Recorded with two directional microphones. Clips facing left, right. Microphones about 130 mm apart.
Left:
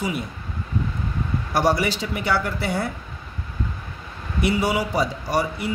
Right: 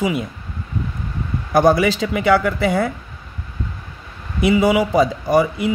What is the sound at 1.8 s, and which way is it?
Speech, 90° right.